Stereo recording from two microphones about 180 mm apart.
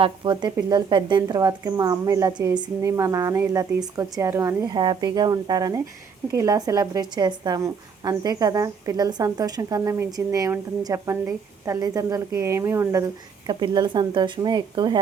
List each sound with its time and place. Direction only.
0.0 s a woman's voice: 25° right (ahead or behind)